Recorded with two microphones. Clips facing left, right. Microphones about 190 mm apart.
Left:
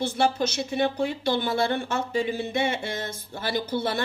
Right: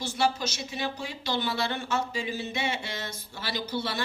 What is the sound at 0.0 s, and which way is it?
Speech, 55° left (ahead or behind).